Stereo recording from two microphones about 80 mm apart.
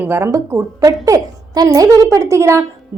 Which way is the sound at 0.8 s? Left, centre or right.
Right.